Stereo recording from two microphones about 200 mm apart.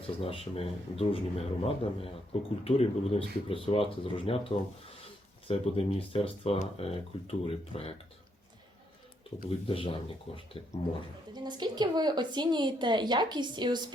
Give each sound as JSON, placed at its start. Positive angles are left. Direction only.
{"t": 0.2, "sound": "speech", "side_deg": 30}
{"t": 9.3, "sound": "speech", "side_deg": 30}
{"t": 11.3, "sound": "a woman's voice", "side_deg": -20}